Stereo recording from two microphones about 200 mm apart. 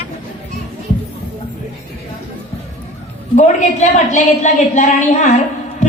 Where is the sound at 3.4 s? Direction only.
35° left (ahead or behind).